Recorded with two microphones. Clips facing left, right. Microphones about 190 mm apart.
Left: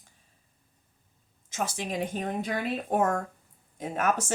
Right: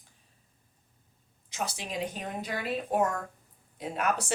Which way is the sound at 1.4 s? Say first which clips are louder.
Left 4 dB; 50° left (ahead or behind).